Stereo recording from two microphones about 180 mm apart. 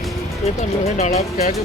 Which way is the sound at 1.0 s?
35° left (ahead or behind).